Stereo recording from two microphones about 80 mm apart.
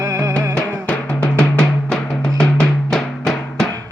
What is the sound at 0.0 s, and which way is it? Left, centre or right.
Music, right.